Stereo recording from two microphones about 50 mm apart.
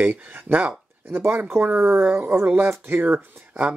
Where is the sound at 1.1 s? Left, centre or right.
Right.